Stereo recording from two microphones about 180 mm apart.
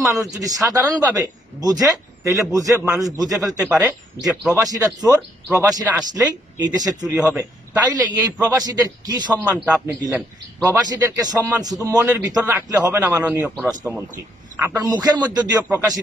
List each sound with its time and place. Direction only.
0.0 s speech: 20° right (ahead or behind)
4.3 s a man's voice: centre (ahead or behind)
4.6 s speech: 20° right (ahead or behind)
7.2 s a man's voice: 10° right (ahead or behind)
7.8 s speech: 20° right (ahead or behind)